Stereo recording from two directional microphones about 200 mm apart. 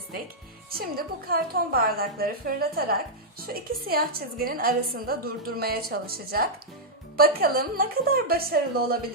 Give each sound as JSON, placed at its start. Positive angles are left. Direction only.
{"t": 0.7, "sound": "a woman's voice", "side_deg": -50}